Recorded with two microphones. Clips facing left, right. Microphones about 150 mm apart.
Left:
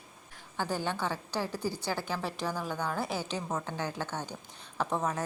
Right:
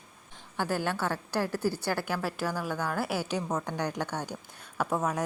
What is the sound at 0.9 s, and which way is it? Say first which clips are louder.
Speech: right 2 dB; 15° left (ahead or behind).